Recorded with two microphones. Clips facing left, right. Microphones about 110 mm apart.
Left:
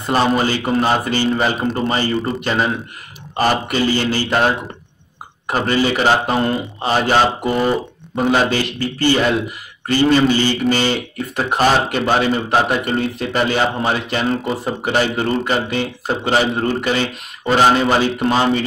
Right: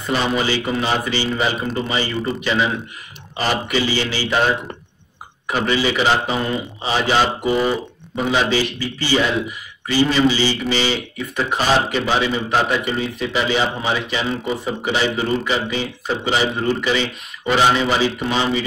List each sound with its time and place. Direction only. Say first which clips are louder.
0.0 s speech: left 4 dB; 45° left (ahead or behind)
5.5 s speech: left 2 dB; 45° left (ahead or behind)
7.5 s speech: left 1 dB; centre (ahead or behind)
8.2 s speech: left 2 dB; 50° left (ahead or behind)